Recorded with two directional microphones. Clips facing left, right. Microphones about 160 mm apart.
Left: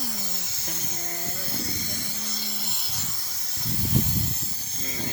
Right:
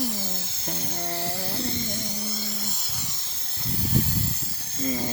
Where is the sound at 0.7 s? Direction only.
30° right (ahead or behind).